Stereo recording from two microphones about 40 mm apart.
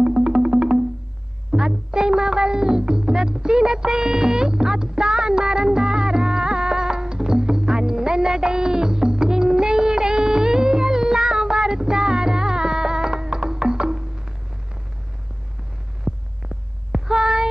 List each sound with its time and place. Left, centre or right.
0.0 s music: centre
16.0 s hum: centre